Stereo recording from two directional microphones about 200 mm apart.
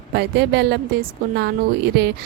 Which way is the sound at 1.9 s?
55° right (ahead or behind).